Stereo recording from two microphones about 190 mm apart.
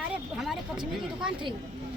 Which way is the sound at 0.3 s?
Centre (ahead or behind).